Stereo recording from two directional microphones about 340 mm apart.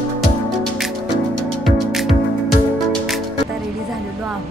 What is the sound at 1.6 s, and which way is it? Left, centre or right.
Music, centre.